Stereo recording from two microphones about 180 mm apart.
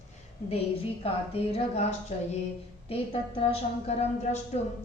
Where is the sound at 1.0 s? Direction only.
35° left (ahead or behind).